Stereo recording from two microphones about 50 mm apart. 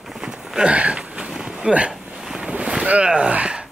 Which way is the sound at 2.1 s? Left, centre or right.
Centre.